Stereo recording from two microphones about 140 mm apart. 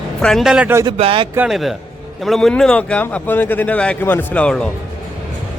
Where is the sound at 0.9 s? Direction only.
40° right (ahead or behind).